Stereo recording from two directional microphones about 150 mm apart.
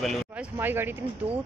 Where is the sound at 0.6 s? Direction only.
15° right (ahead or behind).